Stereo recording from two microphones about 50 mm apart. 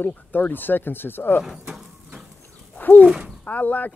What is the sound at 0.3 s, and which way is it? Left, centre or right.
Speech, left.